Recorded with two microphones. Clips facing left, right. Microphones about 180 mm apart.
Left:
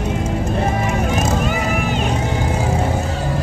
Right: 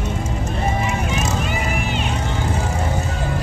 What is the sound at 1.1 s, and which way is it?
Vehicle, 50° left (ahead or behind).